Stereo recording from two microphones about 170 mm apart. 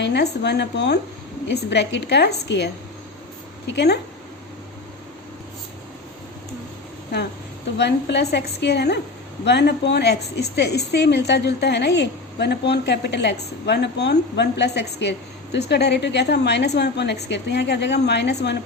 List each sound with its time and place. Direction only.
0.0 s a woman's voice: 80° left
3.7 s a woman's voice: 80° left
7.8 s a woman's voice: 85° left